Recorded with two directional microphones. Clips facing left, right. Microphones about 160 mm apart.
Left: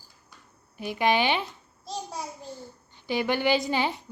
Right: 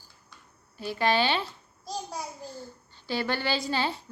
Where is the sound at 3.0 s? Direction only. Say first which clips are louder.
Left 3 dB; 15° left (ahead or behind).